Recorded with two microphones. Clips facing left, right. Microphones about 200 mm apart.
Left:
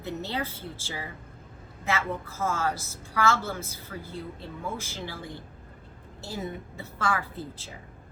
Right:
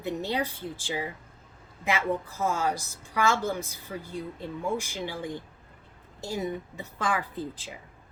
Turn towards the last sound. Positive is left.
turn(degrees=-15)  # may be behind; listen again after turning